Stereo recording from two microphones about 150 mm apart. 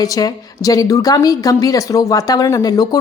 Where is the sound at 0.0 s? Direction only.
25° left (ahead or behind).